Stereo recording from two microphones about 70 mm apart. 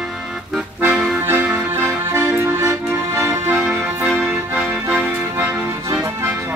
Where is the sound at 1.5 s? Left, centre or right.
Right.